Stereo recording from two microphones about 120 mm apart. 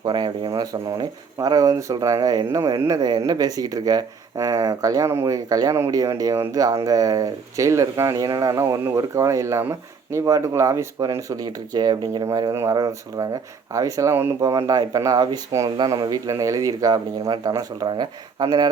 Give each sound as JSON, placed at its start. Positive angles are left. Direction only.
{"t": 0.0, "sound": "speech", "side_deg": -35}
{"t": 14.4, "sound": "speech", "side_deg": -30}